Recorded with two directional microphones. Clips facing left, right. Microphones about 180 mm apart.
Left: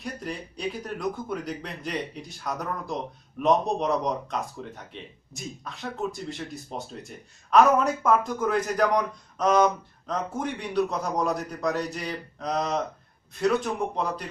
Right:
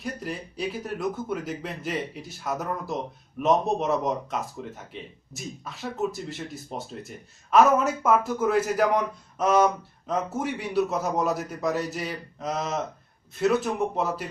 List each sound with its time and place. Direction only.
0.0 s speech: centre (ahead or behind)